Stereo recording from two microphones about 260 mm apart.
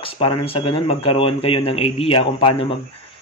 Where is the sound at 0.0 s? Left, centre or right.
Centre.